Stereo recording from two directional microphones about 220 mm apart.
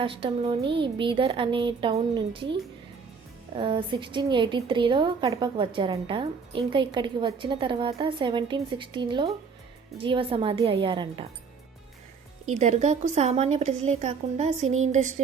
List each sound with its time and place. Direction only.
0.0 s a woman's voice: 25° right (ahead or behind)
12.5 s speech: 30° right (ahead or behind)